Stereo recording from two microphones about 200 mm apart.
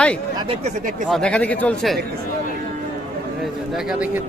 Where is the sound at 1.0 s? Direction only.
5° left (ahead or behind).